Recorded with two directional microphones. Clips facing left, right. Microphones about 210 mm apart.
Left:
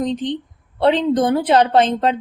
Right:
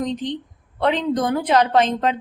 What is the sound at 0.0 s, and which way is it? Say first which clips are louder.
A woman's voice: left 3 dB; 30° left (ahead or behind).